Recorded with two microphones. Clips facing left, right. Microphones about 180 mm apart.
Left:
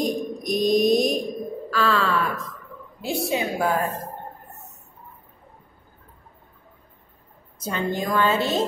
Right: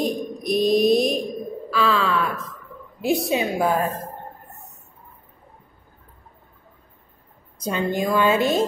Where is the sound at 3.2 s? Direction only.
20° right (ahead or behind).